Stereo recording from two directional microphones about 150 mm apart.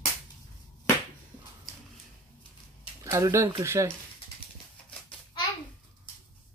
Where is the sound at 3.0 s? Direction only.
20° right (ahead or behind).